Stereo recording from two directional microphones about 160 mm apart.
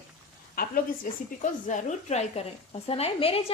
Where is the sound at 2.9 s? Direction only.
35° left (ahead or behind).